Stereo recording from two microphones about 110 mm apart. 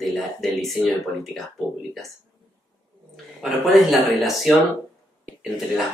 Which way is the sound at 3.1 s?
Centre (ahead or behind).